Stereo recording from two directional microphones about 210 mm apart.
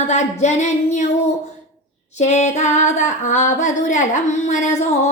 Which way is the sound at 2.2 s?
35° left (ahead or behind).